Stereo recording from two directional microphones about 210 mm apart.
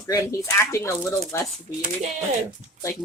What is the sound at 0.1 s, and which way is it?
Speech, 15° left (ahead or behind).